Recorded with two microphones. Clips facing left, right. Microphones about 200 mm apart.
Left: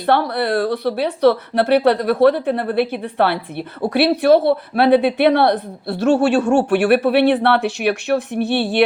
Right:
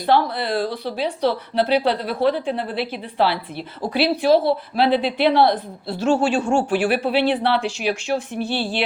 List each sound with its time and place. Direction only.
0.0 s speech: 65° left (ahead or behind)